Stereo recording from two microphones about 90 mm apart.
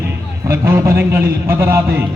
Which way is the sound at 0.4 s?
30° right (ahead or behind).